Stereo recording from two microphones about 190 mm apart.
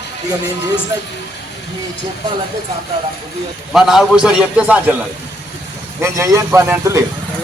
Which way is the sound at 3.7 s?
Centre (ahead or behind).